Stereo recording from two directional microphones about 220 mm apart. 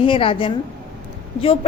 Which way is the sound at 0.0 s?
25° left (ahead or behind).